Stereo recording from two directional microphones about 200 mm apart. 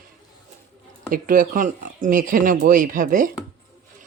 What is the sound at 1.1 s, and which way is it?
Speech, 45° right (ahead or behind).